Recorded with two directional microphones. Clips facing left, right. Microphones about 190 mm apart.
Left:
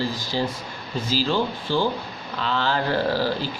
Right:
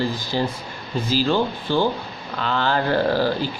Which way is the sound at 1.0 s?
50° right (ahead or behind).